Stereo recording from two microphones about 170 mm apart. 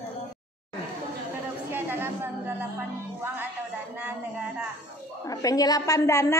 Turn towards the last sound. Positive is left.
turn(degrees=15)  # may be behind; listen again after turning